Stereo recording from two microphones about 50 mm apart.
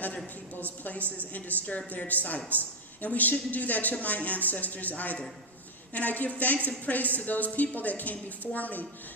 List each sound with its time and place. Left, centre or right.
1.9 s a woman's voice: left